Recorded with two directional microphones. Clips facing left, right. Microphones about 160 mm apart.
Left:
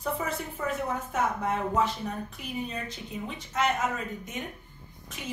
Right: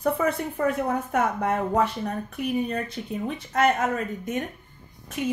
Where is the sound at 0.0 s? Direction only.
60° right (ahead or behind).